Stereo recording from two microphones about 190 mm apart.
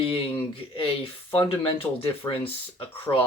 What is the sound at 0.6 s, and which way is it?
Speech, 5° right (ahead or behind).